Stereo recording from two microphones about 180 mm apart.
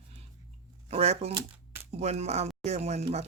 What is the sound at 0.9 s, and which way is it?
Speech, 35° right (ahead or behind).